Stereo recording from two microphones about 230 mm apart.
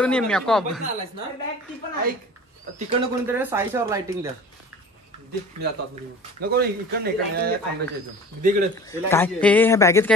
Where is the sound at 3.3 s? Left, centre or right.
Centre.